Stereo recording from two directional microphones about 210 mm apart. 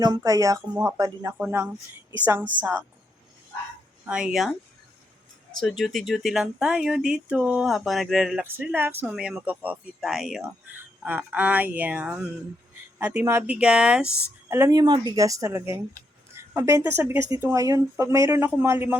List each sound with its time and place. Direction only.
0.0 s speech: 15° right (ahead or behind)
4.0 s speech: 5° right (ahead or behind)
5.5 s speech: centre (ahead or behind)